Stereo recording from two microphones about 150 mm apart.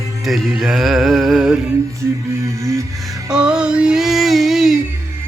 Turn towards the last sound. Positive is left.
turn(degrees=0)  # may be behind; listen again after turning